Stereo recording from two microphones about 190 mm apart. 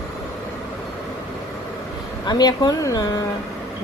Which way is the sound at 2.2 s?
20° left (ahead or behind).